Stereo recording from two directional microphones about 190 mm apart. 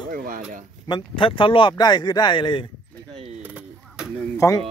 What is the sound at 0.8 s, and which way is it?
Speech, 25° left (ahead or behind).